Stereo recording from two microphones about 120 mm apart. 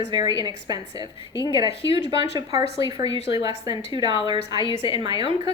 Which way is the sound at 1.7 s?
50° left (ahead or behind).